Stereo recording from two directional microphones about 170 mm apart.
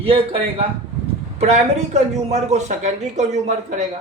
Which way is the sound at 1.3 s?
40° right (ahead or behind).